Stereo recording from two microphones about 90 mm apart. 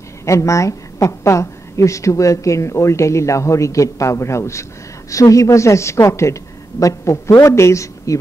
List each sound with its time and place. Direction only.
0.2 s a woman's voice: 35° left (ahead or behind)